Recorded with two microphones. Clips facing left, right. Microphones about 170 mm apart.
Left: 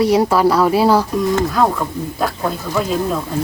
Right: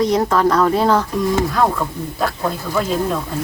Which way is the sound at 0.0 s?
10° left (ahead or behind).